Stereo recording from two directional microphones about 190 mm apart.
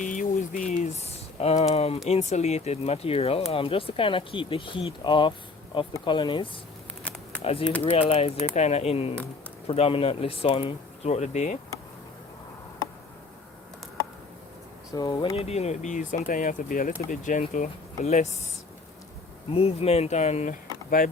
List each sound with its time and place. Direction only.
0.0 s a sound: 45° left (ahead or behind)
2.0 s speech: 35° left (ahead or behind)
14.9 s speech: 25° left (ahead or behind)
19.5 s speech: 30° left (ahead or behind)